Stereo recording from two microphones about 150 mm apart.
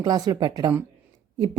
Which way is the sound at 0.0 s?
25° right (ahead or behind).